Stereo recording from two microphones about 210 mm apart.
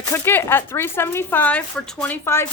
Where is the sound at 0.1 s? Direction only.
10° left (ahead or behind).